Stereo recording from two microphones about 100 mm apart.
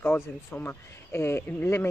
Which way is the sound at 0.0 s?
20° left (ahead or behind).